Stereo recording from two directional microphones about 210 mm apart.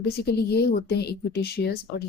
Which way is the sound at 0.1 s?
50° left (ahead or behind).